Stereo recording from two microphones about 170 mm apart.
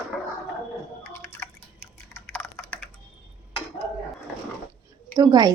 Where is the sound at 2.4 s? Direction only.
5° left (ahead or behind).